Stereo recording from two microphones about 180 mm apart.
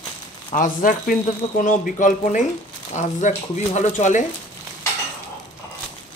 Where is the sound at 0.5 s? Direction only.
45° left (ahead or behind).